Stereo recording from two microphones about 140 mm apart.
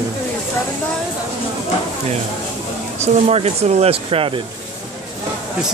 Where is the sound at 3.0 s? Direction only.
50° right (ahead or behind).